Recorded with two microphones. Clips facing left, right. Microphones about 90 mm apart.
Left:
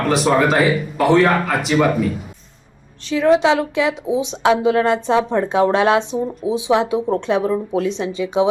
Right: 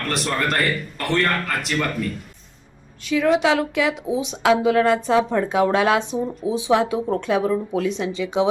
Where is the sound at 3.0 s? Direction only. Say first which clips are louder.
Left 4 dB; 25° left (ahead or behind).